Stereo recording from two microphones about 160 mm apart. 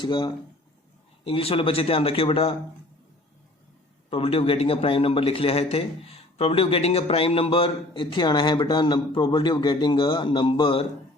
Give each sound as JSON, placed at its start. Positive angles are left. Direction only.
{"t": 0.0, "sound": "a man's voice", "side_deg": 30}
{"t": 4.1, "sound": "a man's voice", "side_deg": 35}